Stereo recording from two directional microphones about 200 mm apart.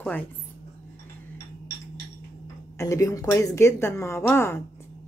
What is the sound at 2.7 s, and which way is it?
A woman's voice, 15° left (ahead or behind).